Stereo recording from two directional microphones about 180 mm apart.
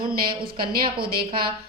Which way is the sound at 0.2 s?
55° right (ahead or behind).